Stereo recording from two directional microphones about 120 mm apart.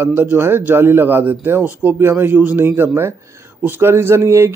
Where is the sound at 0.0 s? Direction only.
15° right (ahead or behind).